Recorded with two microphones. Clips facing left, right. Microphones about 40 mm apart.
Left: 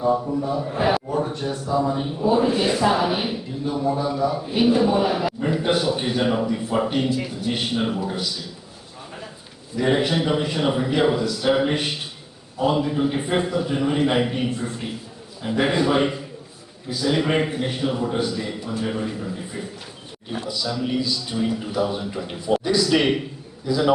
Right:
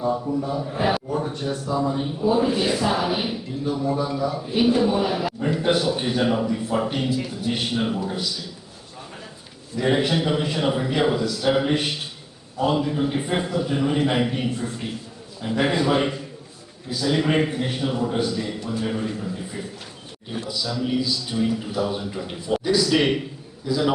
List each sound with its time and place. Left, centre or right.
0.0 s a man's voice: centre
9.7 s a man's voice: centre